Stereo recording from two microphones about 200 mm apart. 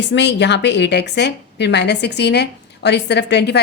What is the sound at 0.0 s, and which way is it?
A woman's voice, 60° left (ahead or behind).